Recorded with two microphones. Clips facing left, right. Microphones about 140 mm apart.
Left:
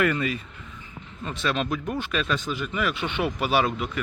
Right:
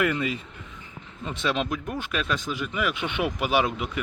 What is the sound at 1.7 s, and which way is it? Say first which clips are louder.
Speech: left 2 dB; 5° right (ahead or behind).